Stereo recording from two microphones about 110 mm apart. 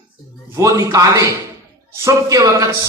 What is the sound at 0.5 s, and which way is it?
A man's voice, 30° right (ahead or behind).